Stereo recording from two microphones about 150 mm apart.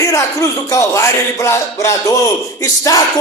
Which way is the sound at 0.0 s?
20° left (ahead or behind).